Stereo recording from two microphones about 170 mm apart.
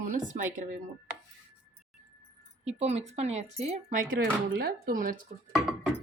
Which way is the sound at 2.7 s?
40° right (ahead or behind).